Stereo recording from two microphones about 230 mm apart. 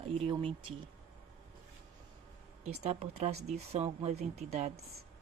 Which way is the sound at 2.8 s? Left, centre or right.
Right.